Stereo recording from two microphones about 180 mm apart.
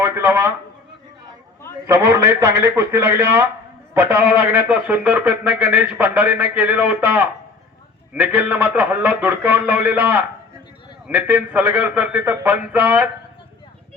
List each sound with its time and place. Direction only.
0.0 s a man's voice: 10° right (ahead or behind)
1.9 s a man's voice: 15° right (ahead or behind)